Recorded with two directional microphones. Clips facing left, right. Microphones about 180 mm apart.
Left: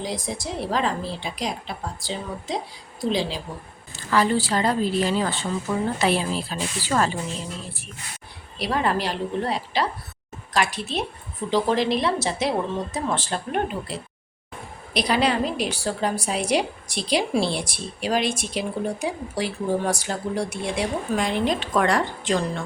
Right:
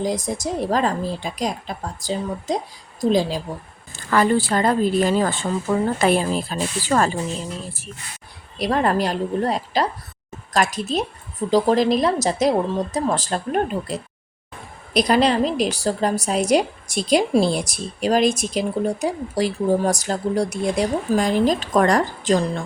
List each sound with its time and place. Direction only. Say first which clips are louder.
0.0 s a woman's voice: right 6 dB; 45° right (ahead or behind)
8.5 s a woman's voice: right 4 dB; 45° right (ahead or behind)